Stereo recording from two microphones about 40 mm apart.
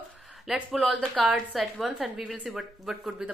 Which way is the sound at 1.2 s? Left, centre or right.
Centre.